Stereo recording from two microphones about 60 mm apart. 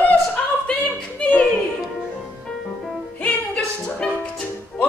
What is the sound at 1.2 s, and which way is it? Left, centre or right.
Music, left.